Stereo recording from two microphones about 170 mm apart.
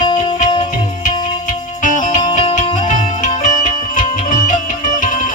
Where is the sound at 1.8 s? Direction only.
50° left (ahead or behind).